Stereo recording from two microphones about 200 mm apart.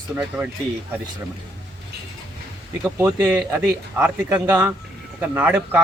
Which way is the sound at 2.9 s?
10° right (ahead or behind).